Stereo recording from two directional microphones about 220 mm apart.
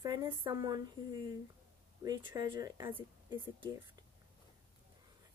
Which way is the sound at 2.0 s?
20° right (ahead or behind).